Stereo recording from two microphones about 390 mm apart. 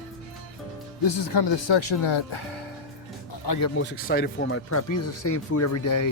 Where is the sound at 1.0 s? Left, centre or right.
Left.